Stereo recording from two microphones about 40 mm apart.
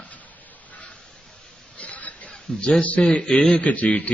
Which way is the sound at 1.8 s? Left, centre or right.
Left.